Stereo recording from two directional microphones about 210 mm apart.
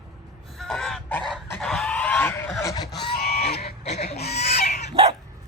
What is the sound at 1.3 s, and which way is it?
Fowl, centre (ahead or behind).